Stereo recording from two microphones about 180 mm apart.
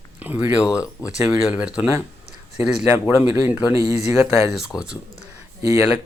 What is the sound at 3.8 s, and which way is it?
Speech, 35° left (ahead or behind).